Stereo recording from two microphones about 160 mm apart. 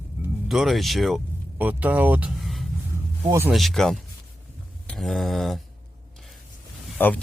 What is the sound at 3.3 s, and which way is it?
Burping, 15° right (ahead or behind).